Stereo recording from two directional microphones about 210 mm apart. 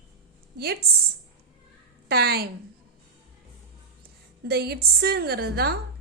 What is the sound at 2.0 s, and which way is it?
Speech, 50° right (ahead or behind).